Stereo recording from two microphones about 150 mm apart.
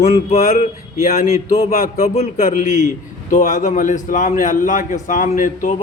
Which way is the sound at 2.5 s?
60° left (ahead or behind).